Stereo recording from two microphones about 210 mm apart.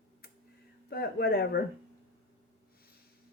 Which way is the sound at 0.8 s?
45° left (ahead or behind).